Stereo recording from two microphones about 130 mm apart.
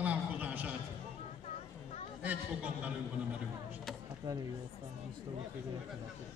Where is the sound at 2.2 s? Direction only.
10° right (ahead or behind).